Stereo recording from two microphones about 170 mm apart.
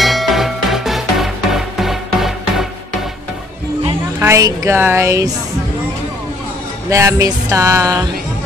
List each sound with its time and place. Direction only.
0.0 s music: centre (ahead or behind)
4.2 s music: 20° right (ahead or behind)
6.9 s music: 15° right (ahead or behind)